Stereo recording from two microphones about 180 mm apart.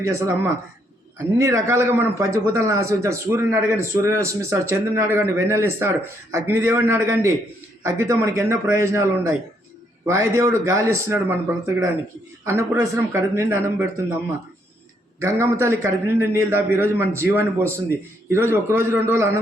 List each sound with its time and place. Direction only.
0.0 s a man's voice: 15° right (ahead or behind)
1.4 s a man's voice: 15° right (ahead or behind)
15.2 s a man's voice: 15° right (ahead or behind)